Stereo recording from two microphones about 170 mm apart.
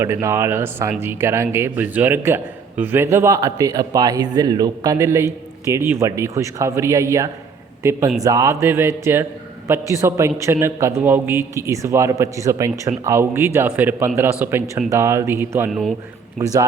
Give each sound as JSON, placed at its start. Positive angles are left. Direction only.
{"t": 0.0, "sound": "a man's voice", "side_deg": -15}